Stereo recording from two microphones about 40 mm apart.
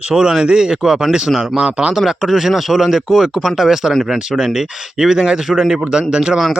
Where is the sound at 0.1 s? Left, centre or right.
Centre.